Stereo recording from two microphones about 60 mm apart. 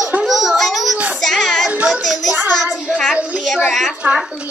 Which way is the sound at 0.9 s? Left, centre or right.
Right.